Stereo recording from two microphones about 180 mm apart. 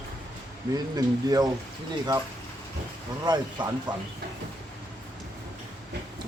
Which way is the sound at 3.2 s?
20° right (ahead or behind).